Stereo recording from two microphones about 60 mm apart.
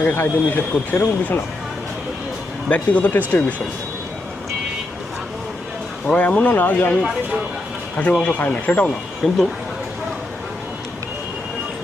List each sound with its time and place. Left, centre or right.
0.0 s speech: left
2.6 s speech: left
6.1 s speech: left
8.2 s speech: left
9.2 s speech: centre